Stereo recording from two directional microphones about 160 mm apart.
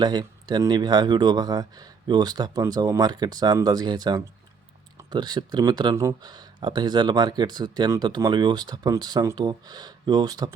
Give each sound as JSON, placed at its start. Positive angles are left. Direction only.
{"t": 0.0, "sound": "speech", "side_deg": -25}